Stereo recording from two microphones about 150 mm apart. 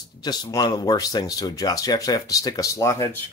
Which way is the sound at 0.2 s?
25° left (ahead or behind).